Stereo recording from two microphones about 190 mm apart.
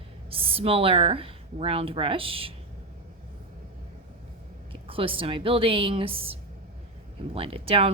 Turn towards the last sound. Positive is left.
turn(degrees=-30)  # may be behind; listen again after turning